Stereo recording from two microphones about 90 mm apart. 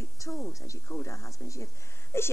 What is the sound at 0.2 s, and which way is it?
Speech, 35° left (ahead or behind).